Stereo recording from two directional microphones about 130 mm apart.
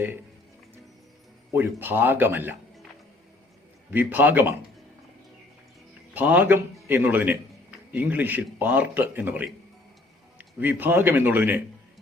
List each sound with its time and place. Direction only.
1.5 s a man's voice: 15° right (ahead or behind)
3.9 s a man's voice: 15° right (ahead or behind)
6.1 s a man's voice: 10° right (ahead or behind)